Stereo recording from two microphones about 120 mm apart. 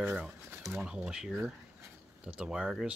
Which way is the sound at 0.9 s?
5° right (ahead or behind).